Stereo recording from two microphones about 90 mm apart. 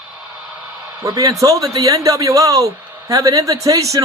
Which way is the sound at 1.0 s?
40° right (ahead or behind).